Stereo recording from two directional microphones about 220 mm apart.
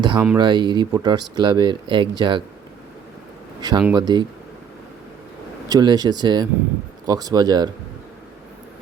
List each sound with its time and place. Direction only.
0.0 s speech: 20° right (ahead or behind)
3.6 s speech: 15° right (ahead or behind)
5.6 s speech: 15° right (ahead or behind)